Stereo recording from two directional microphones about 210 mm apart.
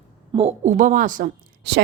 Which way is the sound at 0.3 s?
30° right (ahead or behind).